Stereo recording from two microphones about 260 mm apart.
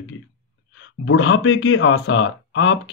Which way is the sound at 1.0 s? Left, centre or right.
Left.